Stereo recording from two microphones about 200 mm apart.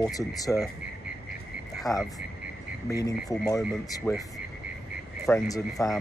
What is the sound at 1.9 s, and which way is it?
Speech, 20° left (ahead or behind).